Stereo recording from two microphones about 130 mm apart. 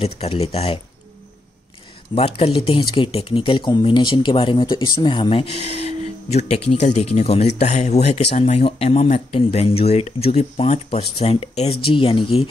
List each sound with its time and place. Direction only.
0.0 s speech: 50° left (ahead or behind)
2.1 s speech: 50° left (ahead or behind)